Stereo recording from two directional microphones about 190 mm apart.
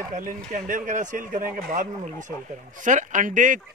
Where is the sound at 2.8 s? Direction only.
40° right (ahead or behind).